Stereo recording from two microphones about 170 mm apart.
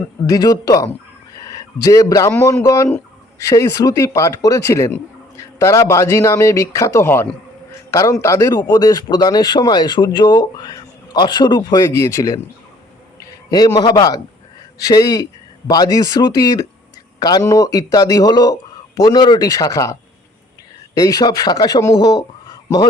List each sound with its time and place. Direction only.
0.3 s a man's voice: 20° left (ahead or behind)
1.4 s a sound: 20° left (ahead or behind)
2.3 s a man's voice: 15° left (ahead or behind)
21.0 s a man's voice: 20° left (ahead or behind)